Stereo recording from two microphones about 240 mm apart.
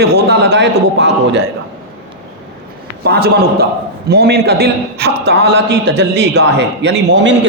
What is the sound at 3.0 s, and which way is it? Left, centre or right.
A man's voice, right.